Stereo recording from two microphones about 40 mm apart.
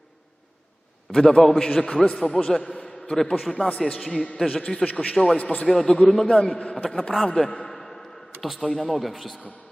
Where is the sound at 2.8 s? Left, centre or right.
Centre.